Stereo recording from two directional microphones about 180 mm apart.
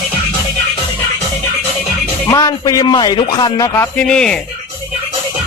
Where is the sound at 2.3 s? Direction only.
20° left (ahead or behind); by 4.4 s 5° left (ahead or behind).